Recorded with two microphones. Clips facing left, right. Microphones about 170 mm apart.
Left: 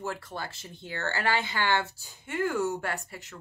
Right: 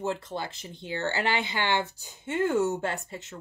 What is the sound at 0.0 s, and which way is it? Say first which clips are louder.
Speech: right 4 dB; 20° right (ahead or behind).